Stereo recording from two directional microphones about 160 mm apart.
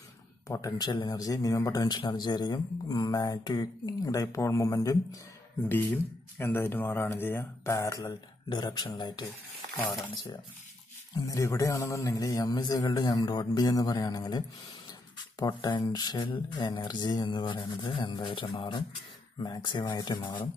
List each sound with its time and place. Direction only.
0.5 s speech: 20° left (ahead or behind)